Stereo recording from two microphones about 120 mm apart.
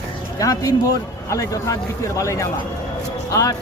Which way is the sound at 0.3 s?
30° left (ahead or behind).